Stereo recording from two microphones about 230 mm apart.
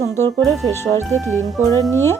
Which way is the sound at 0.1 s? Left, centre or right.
Centre.